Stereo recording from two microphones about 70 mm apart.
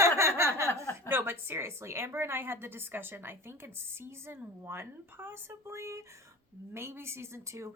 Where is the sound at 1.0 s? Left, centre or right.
Right.